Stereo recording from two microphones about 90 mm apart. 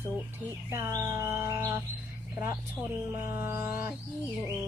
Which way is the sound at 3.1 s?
25° right (ahead or behind).